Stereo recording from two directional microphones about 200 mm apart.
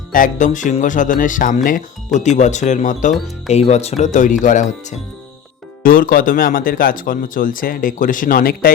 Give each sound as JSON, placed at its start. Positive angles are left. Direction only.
{"t": 0.1, "sound": "speech", "side_deg": 40}